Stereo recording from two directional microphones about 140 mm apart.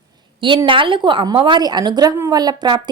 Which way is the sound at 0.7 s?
35° right (ahead or behind).